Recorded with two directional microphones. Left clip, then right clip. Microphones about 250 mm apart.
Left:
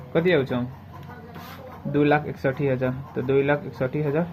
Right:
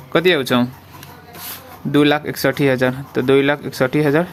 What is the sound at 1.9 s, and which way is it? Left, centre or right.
Speech, right.